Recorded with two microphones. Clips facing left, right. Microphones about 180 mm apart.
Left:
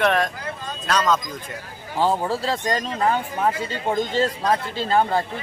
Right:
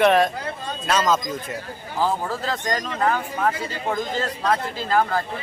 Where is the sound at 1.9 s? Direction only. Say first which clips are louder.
Left 2 dB; 30° left (ahead or behind).